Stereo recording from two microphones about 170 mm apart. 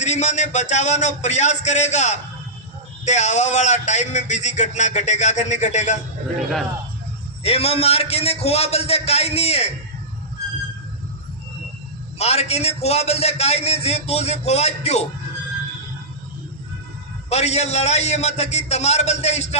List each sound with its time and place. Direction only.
0.0 s a man's voice: 45° left (ahead or behind)
7.4 s a man's voice: 35° left (ahead or behind)
12.2 s a man's voice: 40° left (ahead or behind)
17.2 s a man's voice: 40° left (ahead or behind)